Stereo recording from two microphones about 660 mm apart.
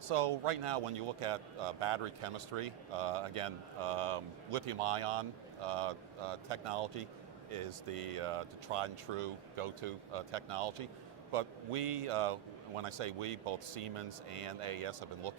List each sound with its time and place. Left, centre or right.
0.1 s a man's voice: right